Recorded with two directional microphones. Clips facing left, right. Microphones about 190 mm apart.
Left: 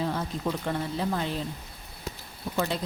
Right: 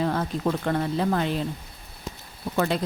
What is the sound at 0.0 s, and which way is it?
Speech, 60° right (ahead or behind).